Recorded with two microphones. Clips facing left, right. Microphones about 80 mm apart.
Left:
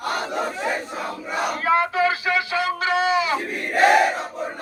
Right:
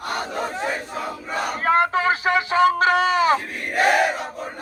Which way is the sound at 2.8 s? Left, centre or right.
Right.